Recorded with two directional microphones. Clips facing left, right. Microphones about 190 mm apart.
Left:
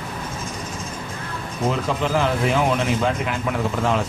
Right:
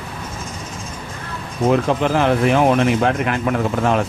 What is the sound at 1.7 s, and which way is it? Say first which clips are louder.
Speech: right 6 dB; 60° right (ahead or behind).